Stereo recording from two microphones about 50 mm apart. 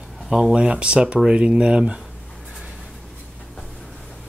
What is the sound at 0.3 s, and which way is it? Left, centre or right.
Speech, centre.